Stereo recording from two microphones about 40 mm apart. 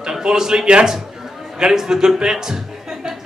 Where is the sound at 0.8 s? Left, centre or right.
Centre.